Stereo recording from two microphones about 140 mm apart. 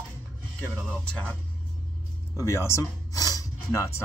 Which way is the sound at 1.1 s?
10° left (ahead or behind).